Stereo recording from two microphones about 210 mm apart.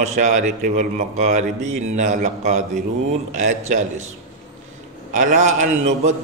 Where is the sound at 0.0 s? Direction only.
35° right (ahead or behind).